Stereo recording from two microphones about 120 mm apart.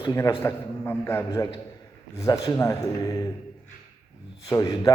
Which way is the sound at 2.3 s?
25° left (ahead or behind).